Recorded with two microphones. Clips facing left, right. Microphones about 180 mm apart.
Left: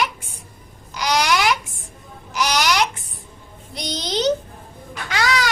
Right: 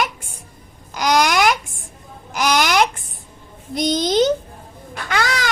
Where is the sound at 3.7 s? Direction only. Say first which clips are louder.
Right 8 dB; 50° right (ahead or behind).